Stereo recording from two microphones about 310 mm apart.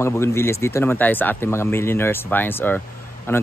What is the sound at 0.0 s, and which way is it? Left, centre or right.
Speech, centre.